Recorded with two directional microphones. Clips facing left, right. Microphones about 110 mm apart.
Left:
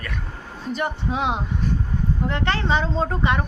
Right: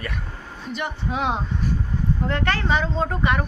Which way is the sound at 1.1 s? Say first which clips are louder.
Right 3 dB; 20° left (ahead or behind).